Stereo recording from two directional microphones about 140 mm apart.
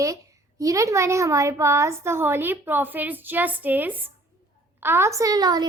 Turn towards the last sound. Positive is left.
turn(degrees=-30)  # may be behind; listen again after turning